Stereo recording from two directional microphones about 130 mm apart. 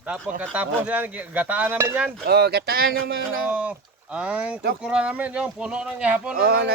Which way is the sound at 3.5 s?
10° right (ahead or behind).